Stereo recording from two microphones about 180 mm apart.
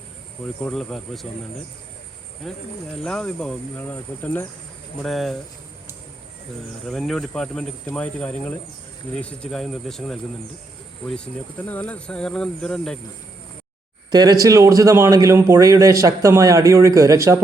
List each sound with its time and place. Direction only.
0.6 s speech: centre (ahead or behind)
2.4 s speech: centre (ahead or behind)
6.8 s speech: centre (ahead or behind)
14.1 s a man's voice: 20° right (ahead or behind)